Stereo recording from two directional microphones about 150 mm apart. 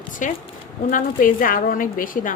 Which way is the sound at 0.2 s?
60° left (ahead or behind).